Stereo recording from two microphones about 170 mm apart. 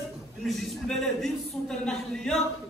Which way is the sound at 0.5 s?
Centre (ahead or behind).